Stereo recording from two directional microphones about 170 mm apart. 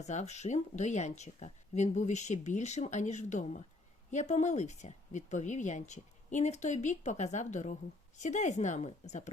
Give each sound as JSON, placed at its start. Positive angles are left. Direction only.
{"t": 0.0, "sound": "speech", "side_deg": 45}